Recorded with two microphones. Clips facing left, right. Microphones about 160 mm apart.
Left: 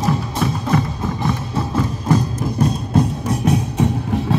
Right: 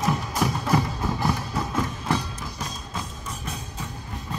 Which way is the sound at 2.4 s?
55° left (ahead or behind).